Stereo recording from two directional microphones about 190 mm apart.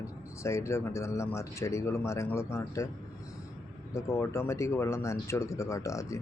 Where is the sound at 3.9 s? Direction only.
15° left (ahead or behind).